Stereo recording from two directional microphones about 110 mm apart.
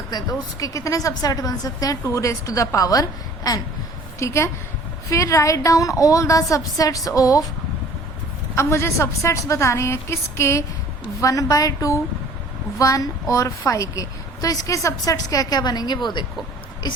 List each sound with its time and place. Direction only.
0.1 s a woman's voice: 35° left (ahead or behind)
8.5 s a woman's voice: 25° left (ahead or behind)